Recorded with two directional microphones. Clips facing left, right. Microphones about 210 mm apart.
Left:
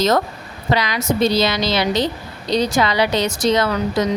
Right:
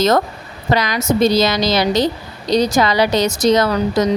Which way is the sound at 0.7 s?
45° right (ahead or behind).